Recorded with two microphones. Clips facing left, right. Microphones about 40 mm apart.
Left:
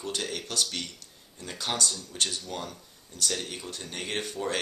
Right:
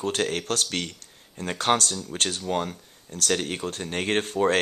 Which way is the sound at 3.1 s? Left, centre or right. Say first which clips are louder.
Right 7 dB; right.